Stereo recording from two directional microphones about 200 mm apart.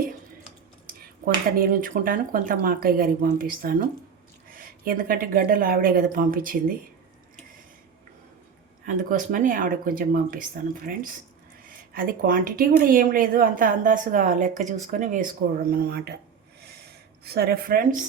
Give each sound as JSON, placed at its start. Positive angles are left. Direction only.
{"t": 0.9, "sound": "speech", "side_deg": -45}
{"t": 8.9, "sound": "a woman's voice", "side_deg": -40}
{"t": 15.7, "sound": "speech", "side_deg": -50}
{"t": 16.6, "sound": "a sound", "side_deg": -50}